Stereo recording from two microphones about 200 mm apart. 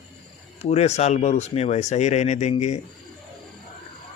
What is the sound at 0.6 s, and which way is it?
Speech, 35° left (ahead or behind).